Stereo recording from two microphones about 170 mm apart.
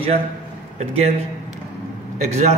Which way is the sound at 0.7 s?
40° right (ahead or behind).